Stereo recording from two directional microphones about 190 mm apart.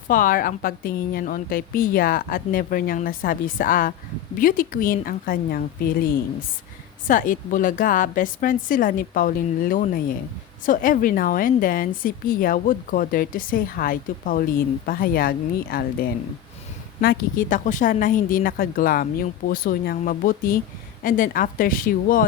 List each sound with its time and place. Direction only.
0.1 s a woman's voice: 45° left (ahead or behind)
7.1 s a woman's voice: 45° left (ahead or behind)